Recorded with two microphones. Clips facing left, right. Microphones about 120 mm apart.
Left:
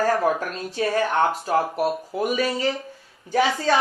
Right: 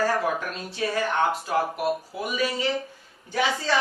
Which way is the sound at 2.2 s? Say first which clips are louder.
Left 7 dB; 45° left (ahead or behind).